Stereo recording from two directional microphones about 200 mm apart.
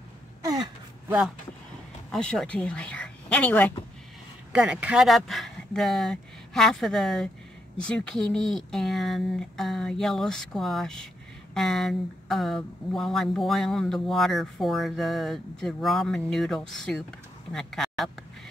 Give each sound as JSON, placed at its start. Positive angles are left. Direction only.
{"t": 0.5, "sound": "gasp", "side_deg": -20}
{"t": 2.0, "sound": "speech", "side_deg": 5}
{"t": 4.5, "sound": "speech", "side_deg": -5}